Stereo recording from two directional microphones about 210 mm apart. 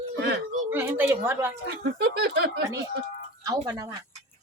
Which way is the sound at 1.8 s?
55° right (ahead or behind).